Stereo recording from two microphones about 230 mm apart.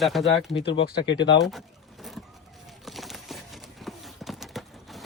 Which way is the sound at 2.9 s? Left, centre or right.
Centre.